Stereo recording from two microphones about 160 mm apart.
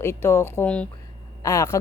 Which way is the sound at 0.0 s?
15° left (ahead or behind).